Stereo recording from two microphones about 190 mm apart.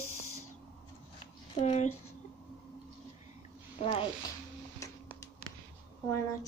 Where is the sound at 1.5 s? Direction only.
35° left (ahead or behind).